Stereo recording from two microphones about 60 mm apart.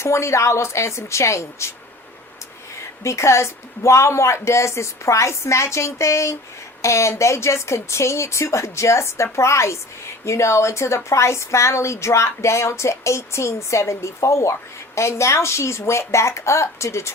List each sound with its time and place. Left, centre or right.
0.0 s a woman's voice: left
3.0 s a woman's voice: left